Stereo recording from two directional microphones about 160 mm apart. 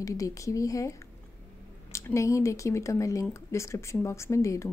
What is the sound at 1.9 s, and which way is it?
Speech, 20° left (ahead or behind).